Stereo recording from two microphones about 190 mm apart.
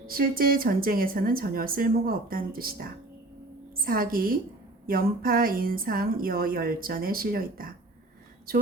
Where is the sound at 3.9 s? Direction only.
50° right (ahead or behind).